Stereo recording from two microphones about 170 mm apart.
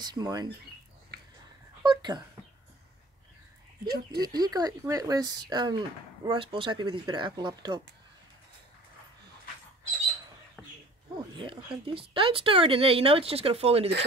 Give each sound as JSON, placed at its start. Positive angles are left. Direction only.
{"t": 0.0, "sound": "speech", "side_deg": -20}
{"t": 1.8, "sound": "a sound", "side_deg": -25}
{"t": 3.8, "sound": "speech", "side_deg": -65}
{"t": 4.2, "sound": "speech", "side_deg": -25}
{"t": 11.8, "sound": "speech", "side_deg": -30}